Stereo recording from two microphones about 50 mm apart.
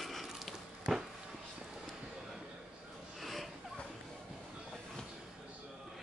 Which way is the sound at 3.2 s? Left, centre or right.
Centre.